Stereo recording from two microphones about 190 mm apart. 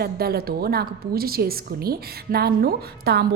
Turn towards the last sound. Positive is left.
turn(degrees=-60)  # may be behind; listen again after turning